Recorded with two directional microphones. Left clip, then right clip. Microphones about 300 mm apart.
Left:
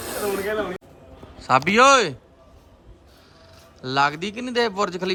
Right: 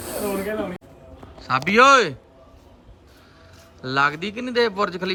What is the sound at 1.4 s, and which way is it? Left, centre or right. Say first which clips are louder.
Speech: even; centre.